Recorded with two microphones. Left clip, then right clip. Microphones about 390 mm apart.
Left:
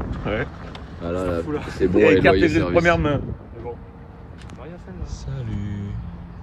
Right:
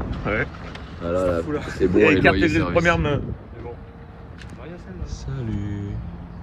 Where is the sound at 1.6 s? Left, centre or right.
Centre.